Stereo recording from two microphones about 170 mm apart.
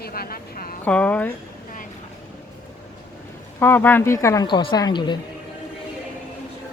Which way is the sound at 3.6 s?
10° left (ahead or behind).